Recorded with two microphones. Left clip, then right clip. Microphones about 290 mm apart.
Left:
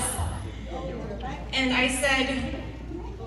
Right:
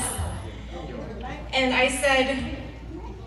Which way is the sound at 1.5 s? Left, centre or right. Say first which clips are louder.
Right 3 dB; right.